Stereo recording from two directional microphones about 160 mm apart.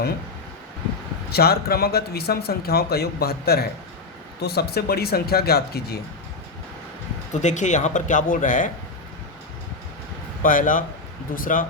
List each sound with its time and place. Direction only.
1.3 s speech: 75° left (ahead or behind)
7.4 s speech: 50° left (ahead or behind)
10.4 s speech: 55° left (ahead or behind)